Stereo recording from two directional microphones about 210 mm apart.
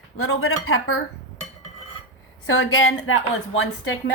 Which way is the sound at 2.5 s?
75° left (ahead or behind).